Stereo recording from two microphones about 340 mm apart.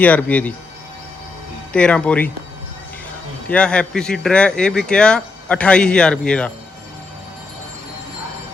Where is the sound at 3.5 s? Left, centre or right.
Centre.